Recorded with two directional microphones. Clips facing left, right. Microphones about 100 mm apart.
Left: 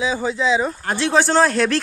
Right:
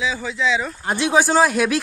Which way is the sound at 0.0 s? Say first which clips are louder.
Left 2 dB; 30° left (ahead or behind).